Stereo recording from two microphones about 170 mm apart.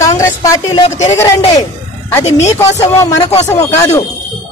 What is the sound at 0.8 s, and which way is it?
Speech, 40° left (ahead or behind).